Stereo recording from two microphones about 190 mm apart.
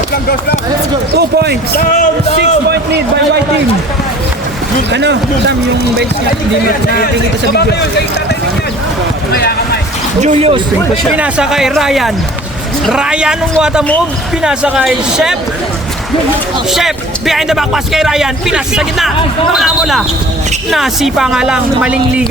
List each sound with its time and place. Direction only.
1.1 s speech: 60° right (ahead or behind)
2.6 s a sound: 60° right (ahead or behind)
4.9 s speech: 65° right (ahead or behind)
7.5 s speech: 60° left (ahead or behind)
9.3 s speech: 55° left (ahead or behind)
10.2 s speech: 35° right (ahead or behind)
11.2 s speech: 5° right (ahead or behind)
16.7 s speech: centre (ahead or behind)